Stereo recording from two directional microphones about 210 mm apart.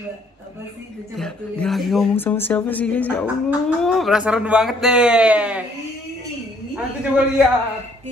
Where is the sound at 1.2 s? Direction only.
5° left (ahead or behind).